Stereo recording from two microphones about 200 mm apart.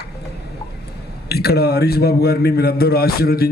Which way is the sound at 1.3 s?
50° left (ahead or behind).